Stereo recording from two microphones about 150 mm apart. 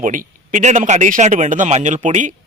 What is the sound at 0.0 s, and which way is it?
A man's voice, 60° right (ahead or behind).